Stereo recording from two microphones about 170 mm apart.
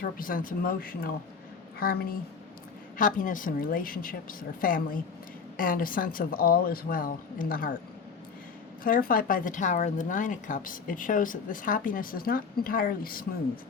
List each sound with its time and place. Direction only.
0.0 s speech: 55° left (ahead or behind)
3.0 s speech: 50° left (ahead or behind)
8.8 s speech: 55° left (ahead or behind)